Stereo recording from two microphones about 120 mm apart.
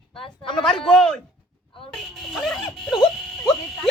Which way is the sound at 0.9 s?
5° left (ahead or behind).